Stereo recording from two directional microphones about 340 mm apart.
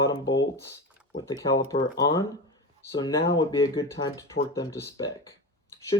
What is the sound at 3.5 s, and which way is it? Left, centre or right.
Speech, centre.